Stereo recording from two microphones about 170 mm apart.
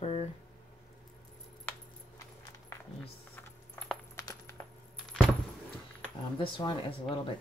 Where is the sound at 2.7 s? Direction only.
15° left (ahead or behind).